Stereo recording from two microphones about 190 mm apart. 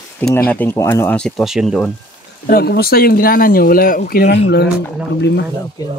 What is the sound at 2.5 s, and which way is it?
Speech, 55° left (ahead or behind).